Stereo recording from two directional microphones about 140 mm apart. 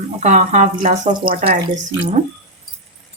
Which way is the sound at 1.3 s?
90° right.